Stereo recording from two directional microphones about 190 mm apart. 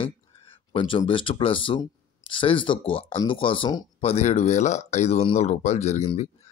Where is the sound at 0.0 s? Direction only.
30° left (ahead or behind).